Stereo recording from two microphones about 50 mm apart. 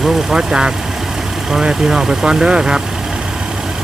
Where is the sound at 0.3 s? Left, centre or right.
Centre.